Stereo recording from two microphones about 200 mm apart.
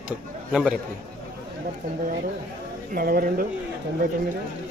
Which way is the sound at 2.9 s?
45° right (ahead or behind).